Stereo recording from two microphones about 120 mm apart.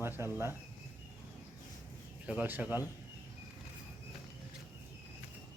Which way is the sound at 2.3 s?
15° right (ahead or behind).